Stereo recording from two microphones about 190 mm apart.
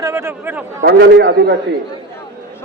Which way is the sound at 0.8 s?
60° right (ahead or behind).